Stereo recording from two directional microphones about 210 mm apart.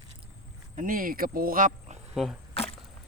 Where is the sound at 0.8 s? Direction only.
40° right (ahead or behind).